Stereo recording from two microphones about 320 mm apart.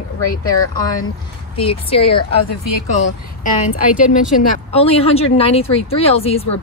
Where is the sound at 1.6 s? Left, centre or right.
Centre.